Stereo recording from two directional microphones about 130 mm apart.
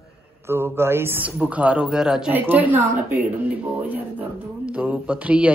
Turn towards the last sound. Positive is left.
turn(degrees=-10)  # may be behind; listen again after turning